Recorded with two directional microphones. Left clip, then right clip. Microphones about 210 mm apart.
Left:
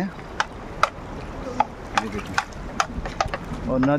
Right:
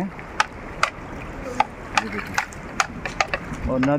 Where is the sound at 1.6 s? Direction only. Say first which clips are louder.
Right 1 dB; 30° right (ahead or behind).